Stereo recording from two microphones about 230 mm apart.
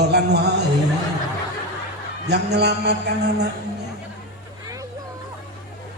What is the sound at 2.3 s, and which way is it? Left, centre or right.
A man's voice, right.